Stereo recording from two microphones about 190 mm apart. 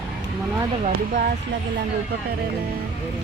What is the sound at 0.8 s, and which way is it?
Speech, 50° right (ahead or behind).